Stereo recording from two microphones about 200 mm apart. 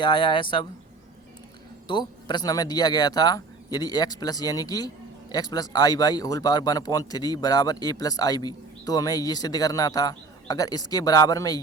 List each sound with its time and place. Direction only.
0.0 s speech: 25° left (ahead or behind)
1.9 s speech: 20° left (ahead or behind)